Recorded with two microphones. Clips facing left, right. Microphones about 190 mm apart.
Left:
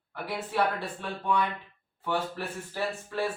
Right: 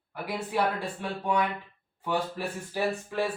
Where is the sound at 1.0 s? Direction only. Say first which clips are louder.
Right 1 dB; 10° right (ahead or behind).